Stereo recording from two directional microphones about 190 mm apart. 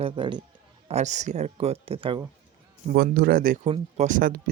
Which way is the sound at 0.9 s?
40° right (ahead or behind).